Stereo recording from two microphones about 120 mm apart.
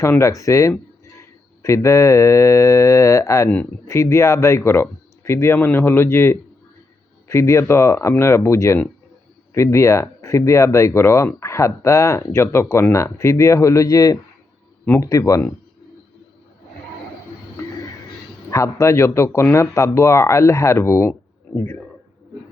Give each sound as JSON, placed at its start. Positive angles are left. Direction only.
{"t": 0.0, "sound": "speech", "side_deg": 25}
{"t": 18.5, "sound": "speech", "side_deg": 25}